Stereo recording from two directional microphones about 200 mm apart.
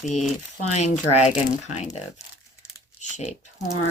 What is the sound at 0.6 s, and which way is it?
Speech, 35° left (ahead or behind).